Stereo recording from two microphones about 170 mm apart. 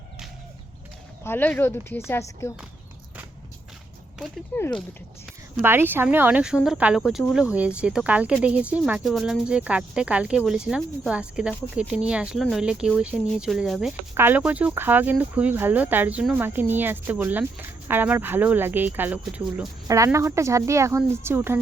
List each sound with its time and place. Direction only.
1.2 s speech: 10° left (ahead or behind)
4.5 s speech: 10° left (ahead or behind)
5.6 s speech: 10° right (ahead or behind)